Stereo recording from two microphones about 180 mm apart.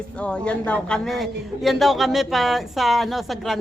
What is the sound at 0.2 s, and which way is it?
A man's voice, 5° left (ahead or behind).